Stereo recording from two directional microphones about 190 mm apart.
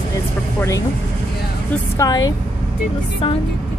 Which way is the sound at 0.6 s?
15° left (ahead or behind).